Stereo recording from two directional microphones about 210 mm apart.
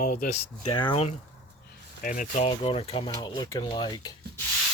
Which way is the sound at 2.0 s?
40° left (ahead or behind).